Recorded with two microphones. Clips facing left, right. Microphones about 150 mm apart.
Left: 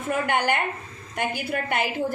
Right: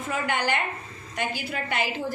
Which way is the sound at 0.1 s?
55° left (ahead or behind).